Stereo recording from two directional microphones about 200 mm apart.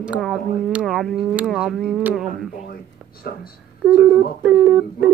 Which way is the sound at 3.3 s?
55° left (ahead or behind).